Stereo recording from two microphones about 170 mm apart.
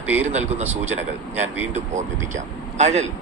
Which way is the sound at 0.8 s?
10° right (ahead or behind).